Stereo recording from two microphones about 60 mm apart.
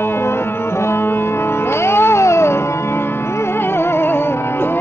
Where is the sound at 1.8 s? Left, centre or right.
Left.